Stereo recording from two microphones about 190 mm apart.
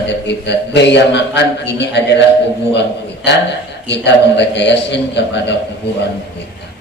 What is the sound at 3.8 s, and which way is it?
A man's voice, 65° left (ahead or behind).